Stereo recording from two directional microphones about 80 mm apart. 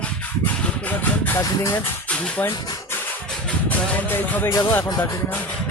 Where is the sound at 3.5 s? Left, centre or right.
Left.